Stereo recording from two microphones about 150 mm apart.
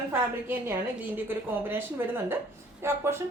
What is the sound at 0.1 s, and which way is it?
Speech, 15° right (ahead or behind).